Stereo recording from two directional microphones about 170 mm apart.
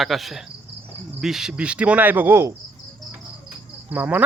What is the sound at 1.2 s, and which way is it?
Cricket, 5° right (ahead or behind).